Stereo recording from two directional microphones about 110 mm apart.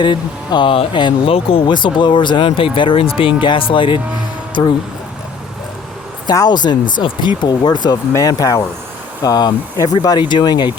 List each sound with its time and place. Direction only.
0.0 s speech: 45° left (ahead or behind)
6.2 s speech: 35° left (ahead or behind)